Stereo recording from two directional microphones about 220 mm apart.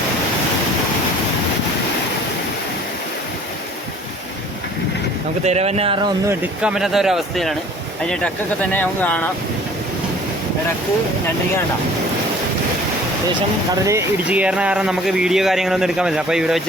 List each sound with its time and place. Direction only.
5.5 s speech: 30° right (ahead or behind)
6.2 s speech: 5° right (ahead or behind)
13.8 s speech: 10° right (ahead or behind)